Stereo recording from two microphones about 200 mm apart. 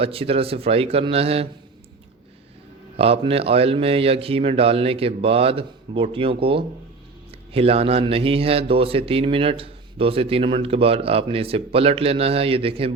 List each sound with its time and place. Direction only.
0.0 s a man's voice: 30° right (ahead or behind)
3.0 s a man's voice: 30° right (ahead or behind)